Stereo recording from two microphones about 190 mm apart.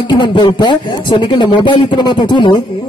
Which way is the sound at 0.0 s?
25° left (ahead or behind).